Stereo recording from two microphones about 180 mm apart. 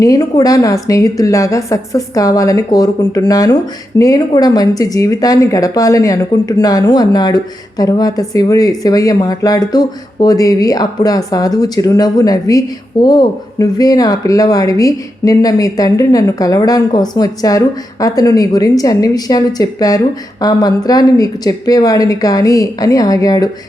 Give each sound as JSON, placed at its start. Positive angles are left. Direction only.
{"t": 0.0, "sound": "a woman's voice", "side_deg": 20}